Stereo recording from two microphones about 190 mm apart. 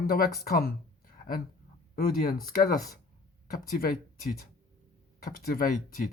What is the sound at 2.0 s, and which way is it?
Speech, 50° left (ahead or behind).